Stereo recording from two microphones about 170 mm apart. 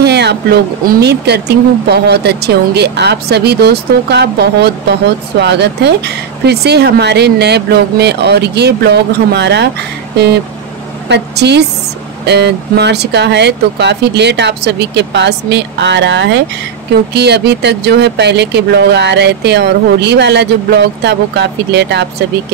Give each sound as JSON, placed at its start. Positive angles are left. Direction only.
{"t": 0.0, "sound": "a woman's voice", "side_deg": -80}
{"t": 17.1, "sound": "speech", "side_deg": -75}